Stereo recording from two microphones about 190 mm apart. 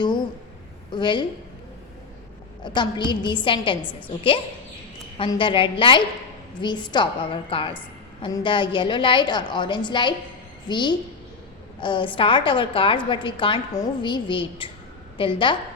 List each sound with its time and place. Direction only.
0.9 s a woman's voice: 25° left (ahead or behind)
2.6 s a woman's voice: 25° left (ahead or behind)